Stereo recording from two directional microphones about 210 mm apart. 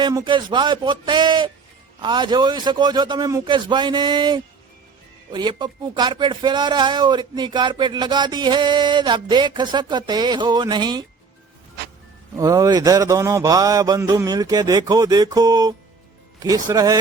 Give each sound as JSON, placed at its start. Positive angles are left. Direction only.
{"t": 0.0, "sound": "speech", "side_deg": -20}
{"t": 12.4, "sound": "speech", "side_deg": -15}